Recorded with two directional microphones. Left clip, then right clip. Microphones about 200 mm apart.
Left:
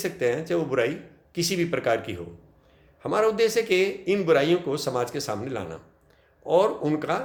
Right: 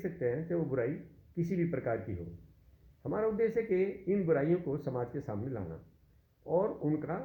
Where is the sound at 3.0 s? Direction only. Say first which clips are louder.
Left 10 dB; 20° left (ahead or behind).